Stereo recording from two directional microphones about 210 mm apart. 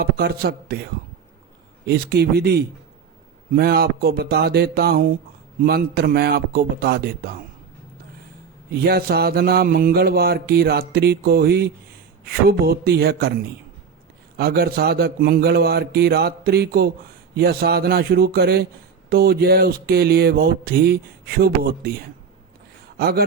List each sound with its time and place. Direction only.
0.0 s mantra: 50° right (ahead or behind)
1.9 s mantra: 50° right (ahead or behind)
8.7 s mantra: 50° right (ahead or behind)
23.0 s speech: 50° right (ahead or behind)